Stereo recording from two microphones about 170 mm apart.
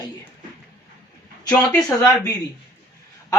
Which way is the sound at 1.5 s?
Centre (ahead or behind).